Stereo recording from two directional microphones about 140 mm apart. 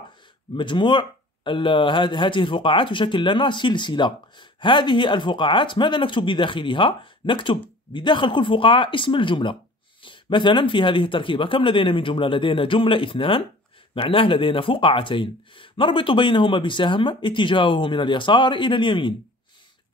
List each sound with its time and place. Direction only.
0.6 s speech: 35° left (ahead or behind)